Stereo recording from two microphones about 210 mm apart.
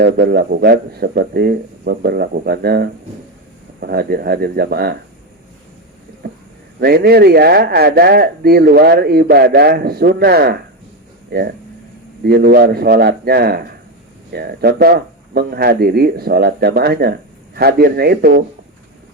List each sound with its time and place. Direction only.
0.0 s speech: 50° right (ahead or behind)
6.7 s speech: 50° right (ahead or behind)